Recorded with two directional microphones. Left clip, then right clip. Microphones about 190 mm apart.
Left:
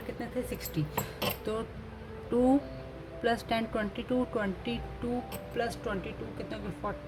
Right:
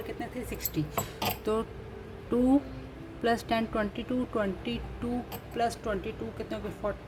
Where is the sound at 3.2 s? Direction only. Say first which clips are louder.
Right 2 dB; 10° right (ahead or behind).